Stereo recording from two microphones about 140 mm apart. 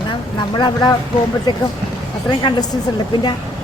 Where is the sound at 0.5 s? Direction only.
30° left (ahead or behind).